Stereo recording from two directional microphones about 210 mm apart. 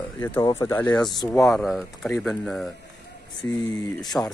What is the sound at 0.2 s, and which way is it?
Speech, 15° left (ahead or behind).